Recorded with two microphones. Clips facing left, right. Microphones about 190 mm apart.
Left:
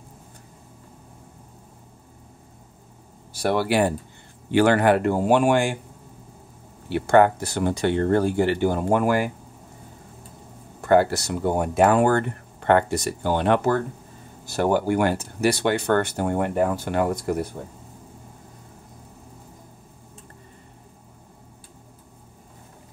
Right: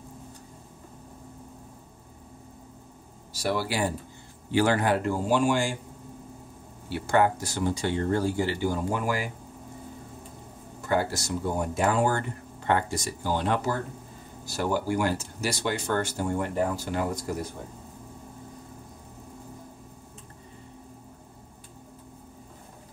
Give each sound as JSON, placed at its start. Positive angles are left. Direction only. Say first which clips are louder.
{"t": 3.3, "sound": "speech", "louder": "left 7 dB", "side_deg": 60}
{"t": 6.9, "sound": "speech", "louder": "left 6 dB", "side_deg": 60}
{"t": 10.8, "sound": "speech", "louder": "left 8 dB", "side_deg": 65}